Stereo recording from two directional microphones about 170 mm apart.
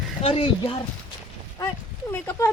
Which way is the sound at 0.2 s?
35° left (ahead or behind).